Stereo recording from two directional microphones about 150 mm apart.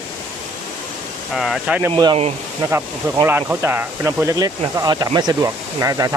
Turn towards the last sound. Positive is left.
turn(degrees=-20)  # may be behind; listen again after turning